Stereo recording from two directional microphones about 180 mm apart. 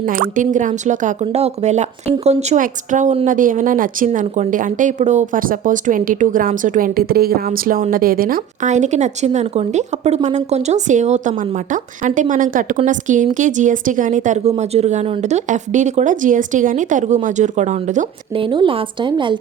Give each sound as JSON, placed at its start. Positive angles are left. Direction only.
{"t": 0.0, "sound": "speech", "side_deg": -45}
{"t": 18.3, "sound": "a woman's voice", "side_deg": -30}